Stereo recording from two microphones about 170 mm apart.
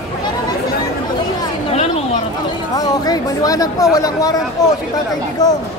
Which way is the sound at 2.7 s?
20° left (ahead or behind).